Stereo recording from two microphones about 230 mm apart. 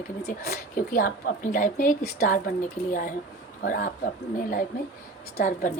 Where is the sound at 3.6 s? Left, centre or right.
Left.